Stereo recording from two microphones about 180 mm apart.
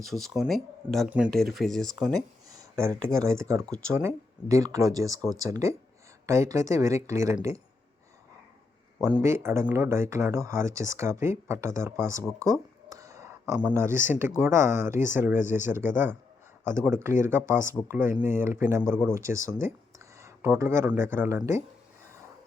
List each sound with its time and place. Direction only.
0.0 s speech: centre (ahead or behind)
2.5 s a sound: 20° right (ahead or behind)
3.1 s speech: 15° right (ahead or behind)
9.0 s speech: 15° right (ahead or behind)
12.4 s a sound: 20° right (ahead or behind)
13.6 s speech: 10° right (ahead or behind)